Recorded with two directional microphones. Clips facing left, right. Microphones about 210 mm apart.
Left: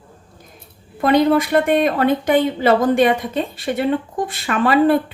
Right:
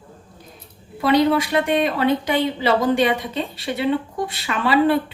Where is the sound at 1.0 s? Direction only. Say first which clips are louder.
Left 2 dB; 50° left (ahead or behind).